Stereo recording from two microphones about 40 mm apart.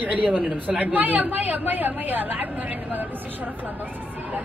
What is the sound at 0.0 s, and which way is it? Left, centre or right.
A man's voice, right.